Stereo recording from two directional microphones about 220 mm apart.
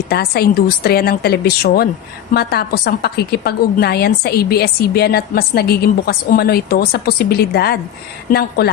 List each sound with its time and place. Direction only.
0.1 s a woman's voice: 45° left (ahead or behind)